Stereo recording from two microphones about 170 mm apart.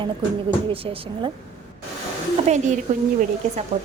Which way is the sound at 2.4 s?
45° right (ahead or behind).